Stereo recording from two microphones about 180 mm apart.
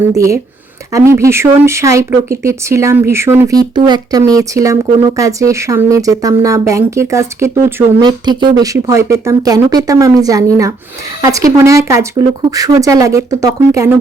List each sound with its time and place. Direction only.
0.9 s speech: 15° right (ahead or behind)